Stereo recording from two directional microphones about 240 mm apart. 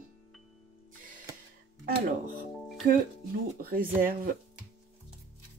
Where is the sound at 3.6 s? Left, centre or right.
Right.